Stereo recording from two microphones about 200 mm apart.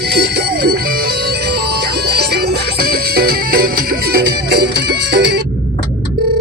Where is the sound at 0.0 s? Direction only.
55° right (ahead or behind).